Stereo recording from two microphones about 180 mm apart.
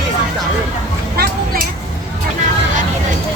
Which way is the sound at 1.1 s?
60° right (ahead or behind).